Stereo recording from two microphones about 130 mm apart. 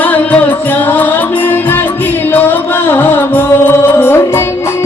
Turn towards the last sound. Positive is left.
turn(degrees=20)  # may be behind; listen again after turning